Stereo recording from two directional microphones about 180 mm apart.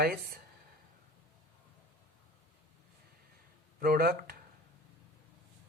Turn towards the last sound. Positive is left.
turn(degrees=-55)  # may be behind; listen again after turning